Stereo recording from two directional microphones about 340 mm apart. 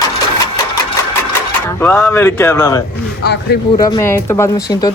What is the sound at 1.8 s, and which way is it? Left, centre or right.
Speech, centre.